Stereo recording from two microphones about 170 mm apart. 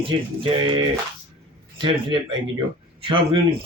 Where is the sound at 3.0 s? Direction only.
30° right (ahead or behind).